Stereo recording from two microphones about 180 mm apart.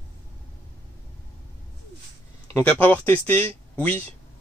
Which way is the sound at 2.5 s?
10° left (ahead or behind).